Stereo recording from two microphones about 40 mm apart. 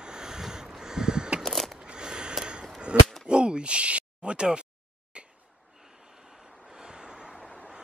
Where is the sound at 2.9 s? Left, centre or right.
Right.